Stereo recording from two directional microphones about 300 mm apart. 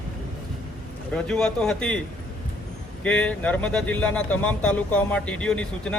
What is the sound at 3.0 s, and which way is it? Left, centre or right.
Speech, centre.